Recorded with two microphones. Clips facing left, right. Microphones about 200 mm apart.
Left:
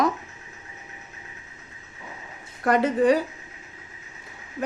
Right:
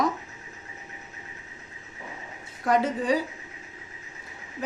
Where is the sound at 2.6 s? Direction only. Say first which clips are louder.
Left 5 dB; 60° left (ahead or behind).